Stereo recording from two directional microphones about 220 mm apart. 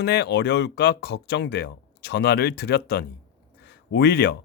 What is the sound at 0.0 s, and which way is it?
Speech, 50° left (ahead or behind).